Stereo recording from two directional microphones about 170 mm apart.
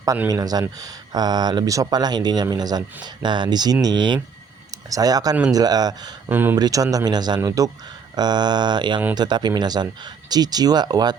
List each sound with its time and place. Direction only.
0.0 s speech: 20° right (ahead or behind)
6.3 s speech: 10° right (ahead or behind)